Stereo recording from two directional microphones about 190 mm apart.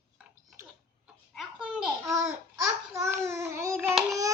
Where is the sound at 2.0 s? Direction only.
15° right (ahead or behind).